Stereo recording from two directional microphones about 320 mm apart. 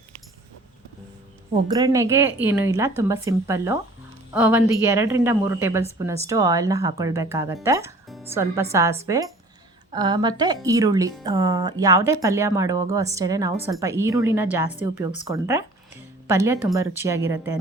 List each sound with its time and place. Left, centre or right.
1.6 s speech: centre